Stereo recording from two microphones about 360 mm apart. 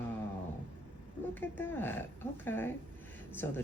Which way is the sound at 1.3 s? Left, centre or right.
Centre.